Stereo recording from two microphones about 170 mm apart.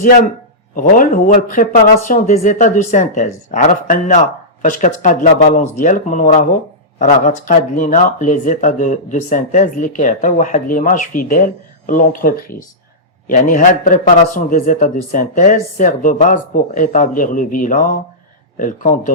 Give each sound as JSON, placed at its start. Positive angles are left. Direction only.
{"t": 0.0, "sound": "speech", "side_deg": 50}